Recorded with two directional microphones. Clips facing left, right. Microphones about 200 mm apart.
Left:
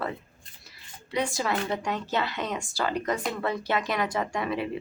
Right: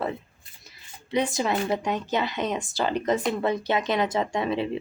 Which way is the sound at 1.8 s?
20° right (ahead or behind).